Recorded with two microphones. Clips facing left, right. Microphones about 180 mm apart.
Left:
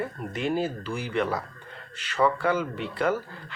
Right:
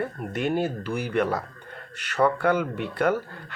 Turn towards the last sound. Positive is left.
turn(degrees=-60)  # may be behind; listen again after turning